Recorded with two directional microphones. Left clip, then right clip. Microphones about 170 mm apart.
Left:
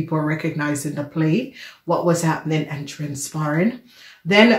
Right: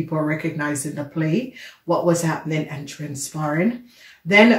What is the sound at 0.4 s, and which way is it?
Speech, 35° left (ahead or behind).